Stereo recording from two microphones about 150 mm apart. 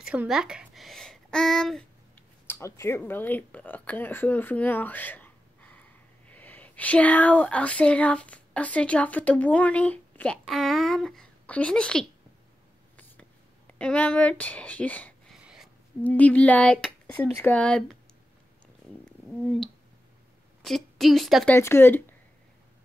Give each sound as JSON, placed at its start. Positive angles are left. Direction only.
{"t": 0.0, "sound": "speech", "side_deg": -5}
{"t": 2.4, "sound": "speech", "side_deg": 15}
{"t": 12.9, "sound": "a sound", "side_deg": 10}
{"t": 15.3, "sound": "a sound", "side_deg": -5}
{"t": 16.0, "sound": "speech", "side_deg": 10}
{"t": 19.4, "sound": "clicking", "side_deg": 0}
{"t": 20.6, "sound": "a woman's voice", "side_deg": 0}
{"t": 21.5, "sound": "speech", "side_deg": 15}